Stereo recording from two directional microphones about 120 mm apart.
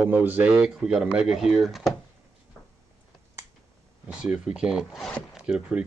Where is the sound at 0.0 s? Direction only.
15° right (ahead or behind).